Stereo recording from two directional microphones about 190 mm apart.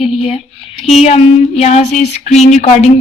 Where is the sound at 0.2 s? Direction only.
30° left (ahead or behind).